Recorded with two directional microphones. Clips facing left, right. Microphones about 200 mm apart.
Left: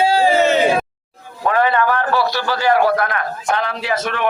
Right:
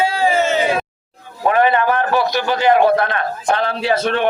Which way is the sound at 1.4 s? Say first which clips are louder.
Right 2 dB; 20° right (ahead or behind).